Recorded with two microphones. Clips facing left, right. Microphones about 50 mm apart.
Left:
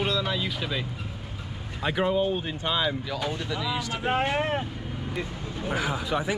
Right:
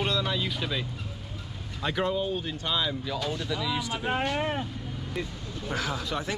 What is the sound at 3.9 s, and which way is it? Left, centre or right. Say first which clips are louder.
Speech: left 2 dB; left.